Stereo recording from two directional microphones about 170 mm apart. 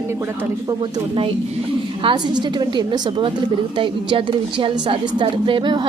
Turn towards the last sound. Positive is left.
turn(degrees=-30)  # may be behind; listen again after turning